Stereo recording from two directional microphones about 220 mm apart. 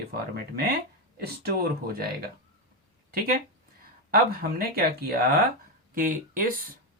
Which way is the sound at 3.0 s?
40° right (ahead or behind).